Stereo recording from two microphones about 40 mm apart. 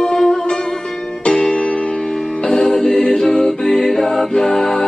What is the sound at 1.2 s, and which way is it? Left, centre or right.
Music, left.